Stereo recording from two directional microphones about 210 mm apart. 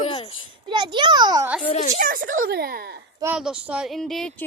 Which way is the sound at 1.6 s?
30° left (ahead or behind).